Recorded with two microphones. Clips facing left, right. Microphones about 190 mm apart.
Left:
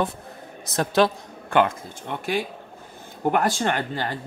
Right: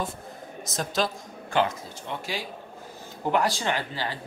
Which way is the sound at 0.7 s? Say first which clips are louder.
Left 8 dB; 60° left (ahead or behind).